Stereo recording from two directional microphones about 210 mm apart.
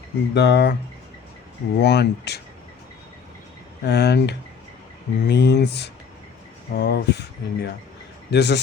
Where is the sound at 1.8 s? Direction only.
55° left (ahead or behind).